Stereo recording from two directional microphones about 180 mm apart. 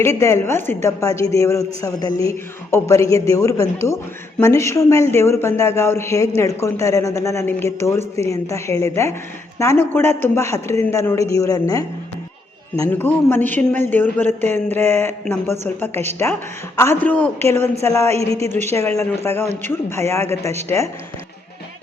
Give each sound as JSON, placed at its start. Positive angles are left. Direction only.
{"t": 0.0, "sound": "a woman's voice", "side_deg": 15}
{"t": 18.2, "sound": "a woman's voice", "side_deg": -35}
{"t": 18.4, "sound": "a woman's voice", "side_deg": 15}